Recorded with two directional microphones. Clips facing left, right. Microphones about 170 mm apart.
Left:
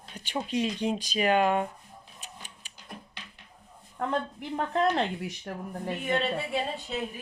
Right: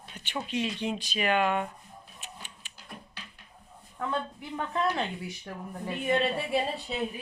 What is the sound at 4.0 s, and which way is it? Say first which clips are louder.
A woman's voice: left 2 dB; 45° left (ahead or behind).